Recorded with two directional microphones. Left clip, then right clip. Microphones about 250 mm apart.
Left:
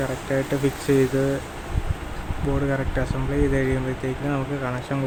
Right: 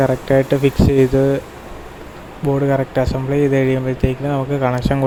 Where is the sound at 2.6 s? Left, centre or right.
Right.